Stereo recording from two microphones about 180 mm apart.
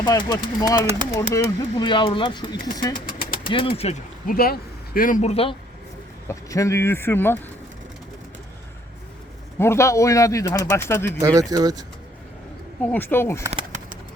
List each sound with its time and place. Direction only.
0.0 s speech: 25° left (ahead or behind)
3.1 s engine: 50° left (ahead or behind)
3.5 s speech: 30° left (ahead or behind)
4.3 s speech: 55° left (ahead or behind); by 5.5 s 35° left (ahead or behind)
6.2 s speech: 15° left (ahead or behind)
9.6 s speech: 15° left (ahead or behind)
11.2 s speech: 20° right (ahead or behind)
12.8 s speech: 10° left (ahead or behind)
13.5 s a sound: 35° right (ahead or behind)